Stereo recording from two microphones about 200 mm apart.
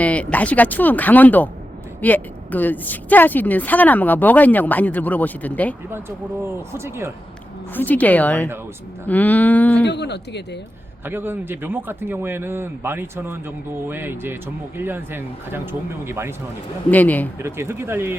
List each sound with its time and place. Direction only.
0.0 s a woman's voice: 5° left (ahead or behind)
5.9 s a man's voice: 10° right (ahead or behind)
7.7 s a woman's voice: 10° left (ahead or behind)
9.8 s speech: 60° left (ahead or behind)
11.0 s a man's voice: 10° right (ahead or behind)
16.9 s a woman's voice: 10° left (ahead or behind)
17.4 s a man's voice: 10° right (ahead or behind)